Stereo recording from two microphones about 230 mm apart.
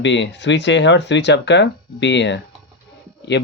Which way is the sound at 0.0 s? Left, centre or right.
Left.